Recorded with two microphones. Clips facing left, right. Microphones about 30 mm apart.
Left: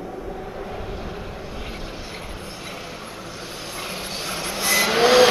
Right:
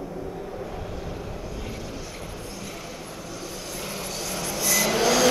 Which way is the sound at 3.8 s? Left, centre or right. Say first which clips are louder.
Left 3 dB; left.